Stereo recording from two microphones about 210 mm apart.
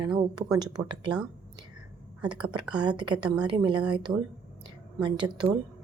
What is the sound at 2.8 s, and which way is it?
Speech, 20° right (ahead or behind).